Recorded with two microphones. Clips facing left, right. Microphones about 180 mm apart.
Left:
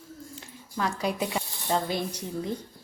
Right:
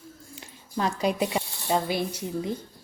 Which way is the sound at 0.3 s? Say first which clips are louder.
Right 3 dB; 20° right (ahead or behind).